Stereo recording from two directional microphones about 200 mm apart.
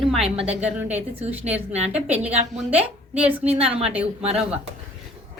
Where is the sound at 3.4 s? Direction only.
30° right (ahead or behind).